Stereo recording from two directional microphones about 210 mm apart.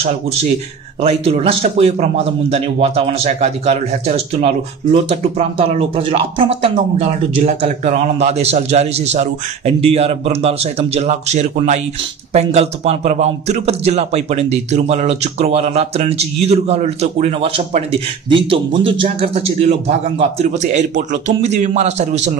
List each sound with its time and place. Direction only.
0.0 s a man's voice: 30° right (ahead or behind)